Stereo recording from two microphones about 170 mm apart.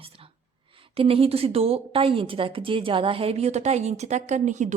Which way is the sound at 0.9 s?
35° right (ahead or behind).